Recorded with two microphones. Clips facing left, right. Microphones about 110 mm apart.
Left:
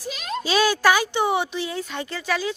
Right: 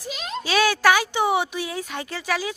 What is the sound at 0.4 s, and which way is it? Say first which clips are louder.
Speech: even; centre (ahead or behind).